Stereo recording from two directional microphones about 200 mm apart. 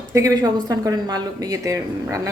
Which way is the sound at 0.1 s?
15° right (ahead or behind).